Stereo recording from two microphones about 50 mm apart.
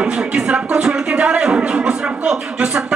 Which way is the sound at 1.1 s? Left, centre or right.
Right.